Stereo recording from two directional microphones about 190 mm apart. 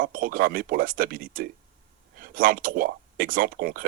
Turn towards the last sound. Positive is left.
turn(degrees=-50)  # may be behind; listen again after turning